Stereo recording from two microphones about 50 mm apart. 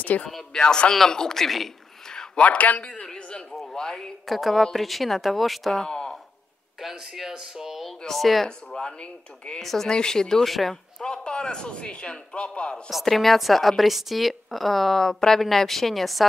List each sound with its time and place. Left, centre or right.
0.3 s speech: centre
2.4 s a man's voice: left
2.9 s a sound: centre
4.3 s speech: centre
5.9 s a sound: centre
6.8 s speech: centre
8.5 s a man's voice: centre
13.0 s speech: centre